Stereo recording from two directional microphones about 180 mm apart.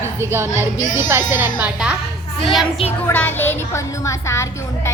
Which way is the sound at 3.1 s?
10° left (ahead or behind).